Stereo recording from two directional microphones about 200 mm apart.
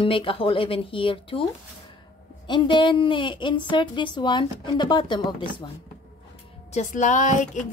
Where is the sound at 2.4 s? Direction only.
25° left (ahead or behind).